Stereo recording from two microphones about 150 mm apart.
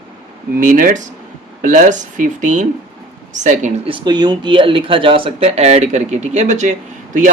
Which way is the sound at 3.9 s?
30° right (ahead or behind).